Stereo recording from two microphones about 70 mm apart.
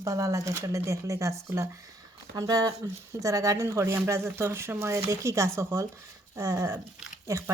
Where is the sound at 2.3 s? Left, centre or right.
Right.